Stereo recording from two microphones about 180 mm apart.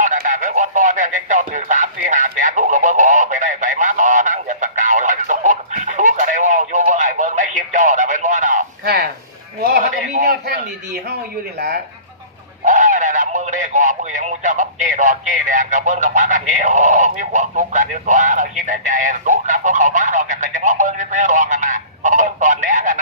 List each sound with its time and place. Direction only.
0.0 s radio: 45° right (ahead or behind)
8.8 s a sound: 60° right (ahead or behind)
12.6 s radio: 45° right (ahead or behind)